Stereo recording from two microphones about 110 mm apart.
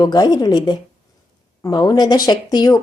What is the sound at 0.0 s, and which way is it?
A woman's voice, 40° left (ahead or behind).